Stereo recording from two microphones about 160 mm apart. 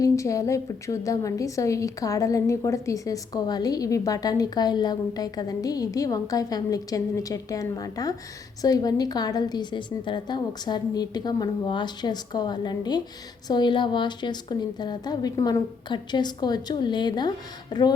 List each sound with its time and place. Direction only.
0.0 s a woman's voice: 20° left (ahead or behind)